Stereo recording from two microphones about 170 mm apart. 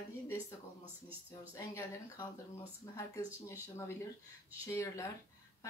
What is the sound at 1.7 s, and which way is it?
Speech, 15° left (ahead or behind).